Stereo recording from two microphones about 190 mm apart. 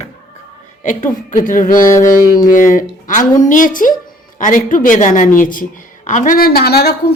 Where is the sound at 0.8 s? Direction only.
40° left (ahead or behind).